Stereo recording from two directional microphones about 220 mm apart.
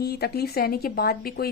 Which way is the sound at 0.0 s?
45° left (ahead or behind).